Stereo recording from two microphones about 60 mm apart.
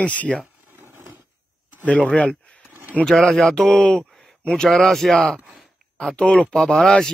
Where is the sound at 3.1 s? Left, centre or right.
Centre.